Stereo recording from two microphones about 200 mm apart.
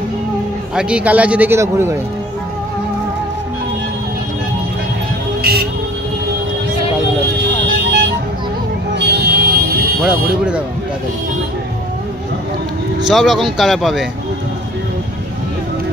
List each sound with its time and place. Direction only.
0.7 s a man's voice: 5° right (ahead or behind)
5.4 s music: 50° right (ahead or behind)
7.8 s vehicle: 60° right (ahead or behind)
10.0 s speech: 5° right (ahead or behind)
13.1 s speech: centre (ahead or behind)